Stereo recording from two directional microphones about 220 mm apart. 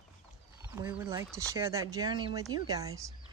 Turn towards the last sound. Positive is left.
turn(degrees=-15)  # may be behind; listen again after turning